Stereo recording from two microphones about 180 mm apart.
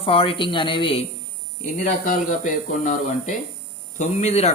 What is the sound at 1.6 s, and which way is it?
Speech, 45° left (ahead or behind).